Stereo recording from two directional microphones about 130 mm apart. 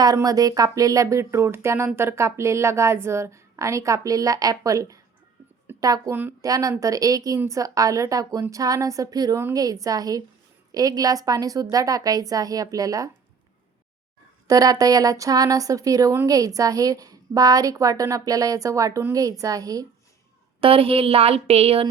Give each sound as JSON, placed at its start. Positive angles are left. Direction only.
{"t": 0.0, "sound": "speech", "side_deg": -30}
{"t": 14.4, "sound": "speech", "side_deg": -30}
{"t": 20.6, "sound": "a woman's voice", "side_deg": -45}